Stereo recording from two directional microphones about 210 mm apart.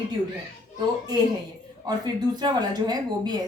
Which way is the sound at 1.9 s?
20° right (ahead or behind).